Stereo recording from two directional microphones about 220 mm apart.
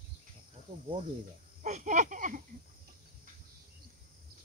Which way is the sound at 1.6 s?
35° right (ahead or behind).